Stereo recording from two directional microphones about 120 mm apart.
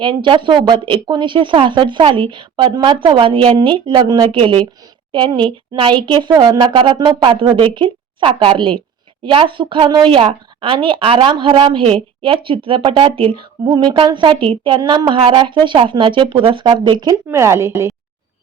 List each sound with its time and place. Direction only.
0.0 s speech: 45° right (ahead or behind)
14.8 s a sound: 40° right (ahead or behind)
15.2 s speech: 45° right (ahead or behind)
17.2 s speech: 20° right (ahead or behind)